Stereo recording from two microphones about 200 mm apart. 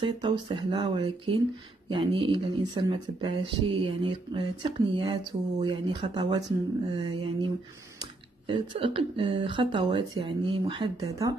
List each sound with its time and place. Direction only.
0.0 s speech: 25° right (ahead or behind)
8.5 s speech: 25° right (ahead or behind)